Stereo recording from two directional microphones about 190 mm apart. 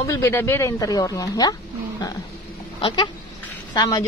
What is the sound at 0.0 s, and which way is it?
Speech, 15° left (ahead or behind).